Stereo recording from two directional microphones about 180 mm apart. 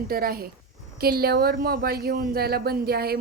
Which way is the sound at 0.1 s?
55° right (ahead or behind).